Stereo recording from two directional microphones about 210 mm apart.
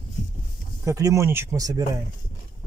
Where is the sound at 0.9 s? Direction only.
15° right (ahead or behind).